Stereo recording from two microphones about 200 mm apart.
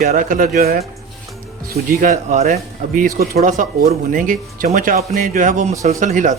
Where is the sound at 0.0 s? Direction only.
40° right (ahead or behind).